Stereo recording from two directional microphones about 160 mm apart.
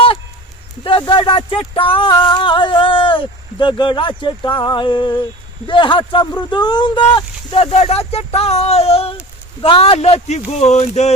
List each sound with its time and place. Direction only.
0.9 s speech: 30° left (ahead or behind)